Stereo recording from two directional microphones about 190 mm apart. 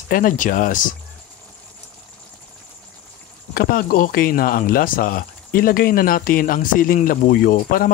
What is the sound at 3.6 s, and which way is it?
Speech, 50° left (ahead or behind).